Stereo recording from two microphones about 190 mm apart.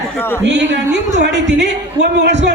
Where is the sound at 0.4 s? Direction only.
65° right (ahead or behind).